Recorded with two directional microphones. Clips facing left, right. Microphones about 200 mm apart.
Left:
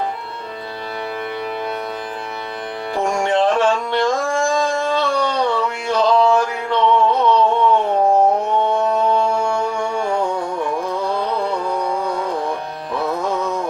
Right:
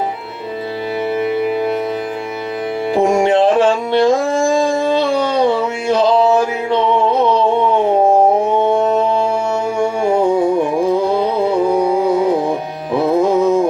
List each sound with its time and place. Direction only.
1.2 s music: 5° right (ahead or behind)
2.9 s music: 15° right (ahead or behind)
3.6 s carnatic music: 25° right (ahead or behind)
4.3 s a sound: 25° right (ahead or behind)
5.1 s a sound: 5° right (ahead or behind)
5.4 s a sound: 20° right (ahead or behind)
8.7 s music: 20° right (ahead or behind)
9.7 s music: 5° right (ahead or behind)
10.3 s carnatic music: 10° right (ahead or behind)
11.5 s music: 10° right (ahead or behind)
13.0 s music: 25° right (ahead or behind)